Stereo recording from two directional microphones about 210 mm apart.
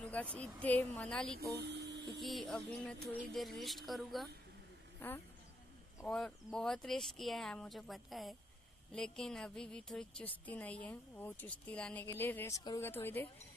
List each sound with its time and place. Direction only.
0.0 s speech: 5° left (ahead or behind)
1.4 s speech: 55° right (ahead or behind)
2.0 s a woman's voice: centre (ahead or behind)